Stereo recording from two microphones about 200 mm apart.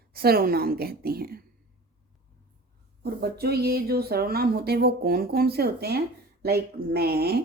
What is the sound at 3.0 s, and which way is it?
Speech, 50° right (ahead or behind).